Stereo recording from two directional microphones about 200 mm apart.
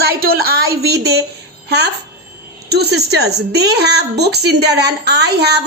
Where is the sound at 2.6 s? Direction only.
55° right (ahead or behind).